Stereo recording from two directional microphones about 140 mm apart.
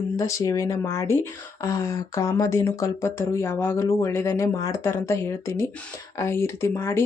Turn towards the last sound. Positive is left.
turn(degrees=15)  # may be behind; listen again after turning